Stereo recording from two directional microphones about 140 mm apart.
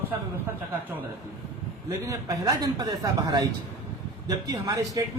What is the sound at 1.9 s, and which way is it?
A man's voice, 25° right (ahead or behind).